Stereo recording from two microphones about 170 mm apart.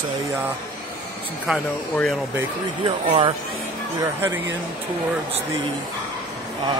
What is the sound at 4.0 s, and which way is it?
Speech, 15° right (ahead or behind).